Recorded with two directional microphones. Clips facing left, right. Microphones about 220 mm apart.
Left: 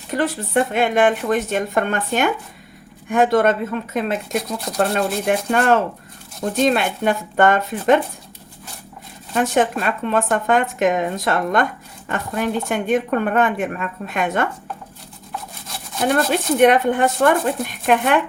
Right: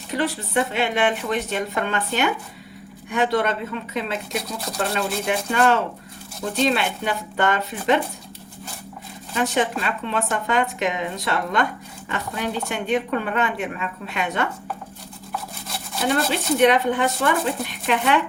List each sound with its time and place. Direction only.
0.1 s a woman's voice: 50° left (ahead or behind)
9.3 s a woman's voice: 50° left (ahead or behind)
16.0 s a woman's voice: 50° left (ahead or behind)